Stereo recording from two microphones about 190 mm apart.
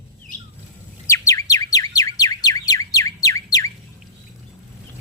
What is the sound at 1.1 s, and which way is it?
Bird, 15° left (ahead or behind).